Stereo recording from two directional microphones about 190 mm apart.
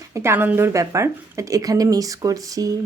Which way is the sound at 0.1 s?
15° right (ahead or behind).